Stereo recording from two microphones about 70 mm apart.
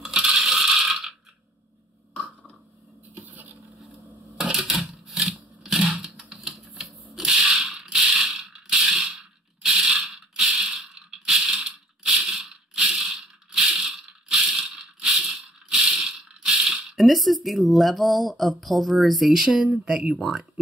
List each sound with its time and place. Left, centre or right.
0.0 s coin: centre
3.2 s boat: right
3.8 s a sound: centre
8.0 s mechanisms: centre
10.4 s crushing: centre
15.0 s ratchet: centre
16.9 s speech: centre